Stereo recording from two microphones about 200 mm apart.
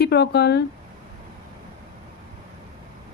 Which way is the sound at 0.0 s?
55° left (ahead or behind).